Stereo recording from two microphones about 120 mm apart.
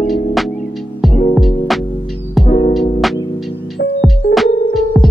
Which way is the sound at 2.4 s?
55° left (ahead or behind).